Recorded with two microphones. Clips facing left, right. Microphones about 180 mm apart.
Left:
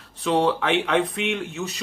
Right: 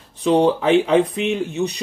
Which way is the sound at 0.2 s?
35° right (ahead or behind).